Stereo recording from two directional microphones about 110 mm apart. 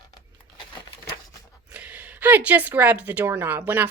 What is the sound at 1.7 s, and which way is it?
Speech, 15° right (ahead or behind).